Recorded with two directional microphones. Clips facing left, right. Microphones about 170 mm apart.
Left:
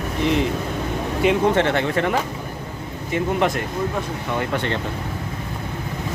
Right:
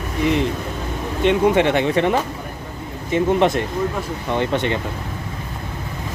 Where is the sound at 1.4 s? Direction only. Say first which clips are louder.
Right 3 dB; 15° right (ahead or behind).